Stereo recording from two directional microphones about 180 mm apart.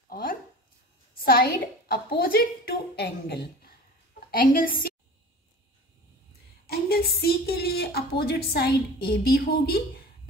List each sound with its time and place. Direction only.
0.1 s a sound: 50° left (ahead or behind)
4.3 s a woman's voice: 50° left (ahead or behind)
6.7 s a woman's voice: 60° left (ahead or behind)